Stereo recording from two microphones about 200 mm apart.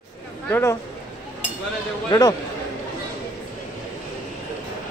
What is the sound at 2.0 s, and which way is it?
Speech, 20° left (ahead or behind).